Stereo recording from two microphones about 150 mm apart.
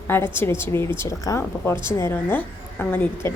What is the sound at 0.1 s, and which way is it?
A woman's voice, 15° left (ahead or behind).